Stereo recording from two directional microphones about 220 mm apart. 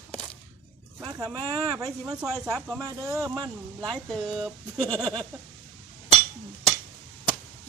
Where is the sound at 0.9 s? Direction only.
15° right (ahead or behind).